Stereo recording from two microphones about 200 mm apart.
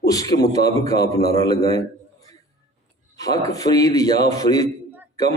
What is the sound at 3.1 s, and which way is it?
A man's voice, 20° left (ahead or behind).